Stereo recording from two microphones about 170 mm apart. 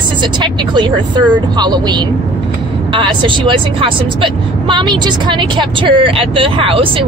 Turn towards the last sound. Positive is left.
turn(degrees=-30)  # may be behind; listen again after turning